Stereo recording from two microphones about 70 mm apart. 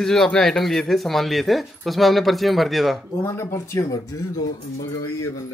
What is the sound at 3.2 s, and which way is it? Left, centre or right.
Speech, left.